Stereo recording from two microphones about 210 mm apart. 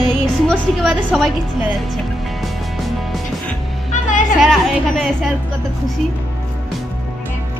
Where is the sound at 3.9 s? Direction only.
35° left (ahead or behind).